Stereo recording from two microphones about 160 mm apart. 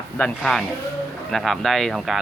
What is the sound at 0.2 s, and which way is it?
Speech, 5° left (ahead or behind).